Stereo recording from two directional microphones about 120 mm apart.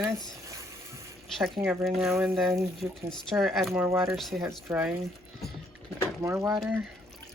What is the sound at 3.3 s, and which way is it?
Speech, centre (ahead or behind).